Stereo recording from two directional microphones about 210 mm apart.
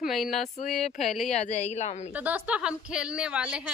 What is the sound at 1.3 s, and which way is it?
Speech, 30° left (ahead or behind).